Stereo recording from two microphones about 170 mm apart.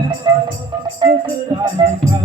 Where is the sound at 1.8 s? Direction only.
25° right (ahead or behind).